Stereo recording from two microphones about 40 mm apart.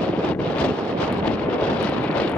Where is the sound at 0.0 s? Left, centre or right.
Left.